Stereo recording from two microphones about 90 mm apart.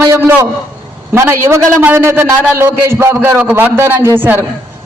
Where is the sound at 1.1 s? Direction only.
30° right (ahead or behind).